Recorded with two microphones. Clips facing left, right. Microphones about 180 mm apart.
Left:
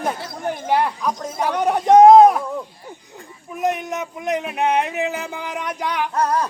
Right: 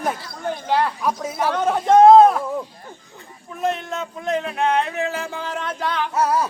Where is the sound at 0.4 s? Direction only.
15° left (ahead or behind).